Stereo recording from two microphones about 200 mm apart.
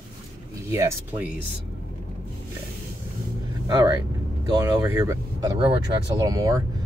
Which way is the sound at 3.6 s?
20° right (ahead or behind).